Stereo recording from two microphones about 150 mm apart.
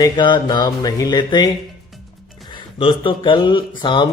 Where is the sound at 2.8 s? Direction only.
35° left (ahead or behind).